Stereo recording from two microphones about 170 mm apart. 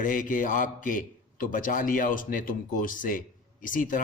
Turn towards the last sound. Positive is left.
turn(degrees=50)  # may be behind; listen again after turning